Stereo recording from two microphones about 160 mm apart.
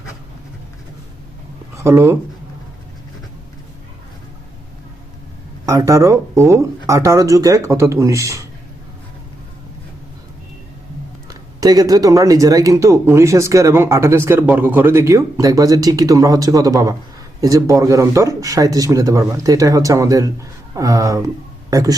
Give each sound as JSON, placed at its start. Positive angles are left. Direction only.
{"t": 1.7, "sound": "speech", "side_deg": -20}
{"t": 5.6, "sound": "speech", "side_deg": -20}
{"t": 11.3, "sound": "speech", "side_deg": -25}